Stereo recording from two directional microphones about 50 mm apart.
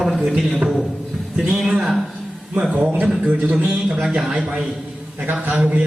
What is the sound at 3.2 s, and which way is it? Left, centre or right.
Speech, right.